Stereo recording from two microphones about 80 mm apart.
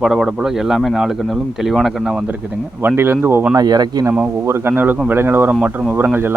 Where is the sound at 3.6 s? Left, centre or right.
Right.